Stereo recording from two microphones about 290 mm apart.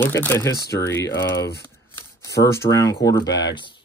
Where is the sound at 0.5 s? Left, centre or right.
Left.